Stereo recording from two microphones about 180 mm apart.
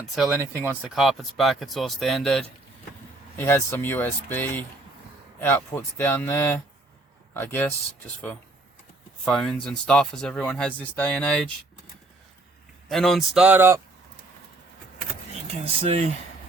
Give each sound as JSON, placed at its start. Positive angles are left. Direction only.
{"t": 0.2, "sound": "speech", "side_deg": -10}
{"t": 0.9, "sound": "speech", "side_deg": 0}
{"t": 3.3, "sound": "speech", "side_deg": 10}
{"t": 9.2, "sound": "speech", "side_deg": 0}
{"t": 12.9, "sound": "speech", "side_deg": 0}
{"t": 15.6, "sound": "speech", "side_deg": -30}